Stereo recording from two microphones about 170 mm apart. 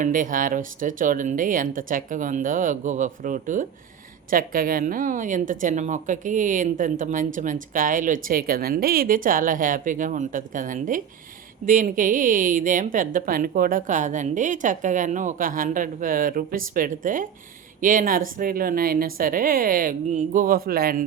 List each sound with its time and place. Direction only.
0.0 s speech: 50° right (ahead or behind)